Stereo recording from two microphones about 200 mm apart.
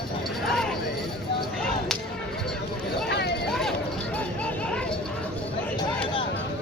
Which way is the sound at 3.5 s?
Centre (ahead or behind).